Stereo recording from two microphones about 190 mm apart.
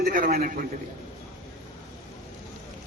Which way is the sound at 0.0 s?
45° right (ahead or behind).